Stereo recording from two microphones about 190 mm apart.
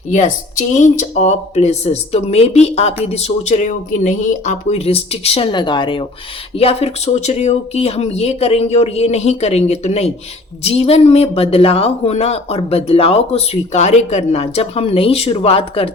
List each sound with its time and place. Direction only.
0.1 s speech: 40° left (ahead or behind)